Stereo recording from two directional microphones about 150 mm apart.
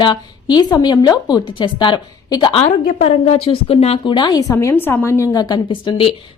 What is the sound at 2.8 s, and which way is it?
A woman's voice, 45° left (ahead or behind).